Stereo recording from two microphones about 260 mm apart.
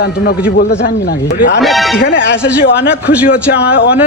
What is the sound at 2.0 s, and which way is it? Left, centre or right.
Speech, left.